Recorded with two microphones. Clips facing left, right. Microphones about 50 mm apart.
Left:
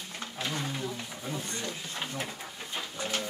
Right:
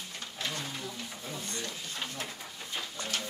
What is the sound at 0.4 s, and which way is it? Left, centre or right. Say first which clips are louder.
Roaring cats: left 3 dB; centre.